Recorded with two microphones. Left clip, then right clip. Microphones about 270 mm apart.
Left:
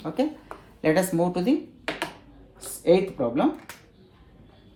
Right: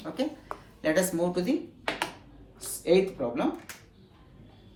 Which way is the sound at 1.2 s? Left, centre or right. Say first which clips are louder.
Left 4 dB; left.